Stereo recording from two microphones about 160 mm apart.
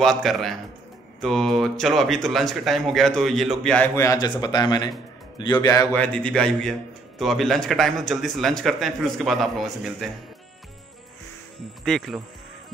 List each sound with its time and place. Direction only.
0.0 s speech: centre (ahead or behind)
3.9 s speech: 20° left (ahead or behind)
5.9 s speech: 5° left (ahead or behind)
11.8 s speech: centre (ahead or behind)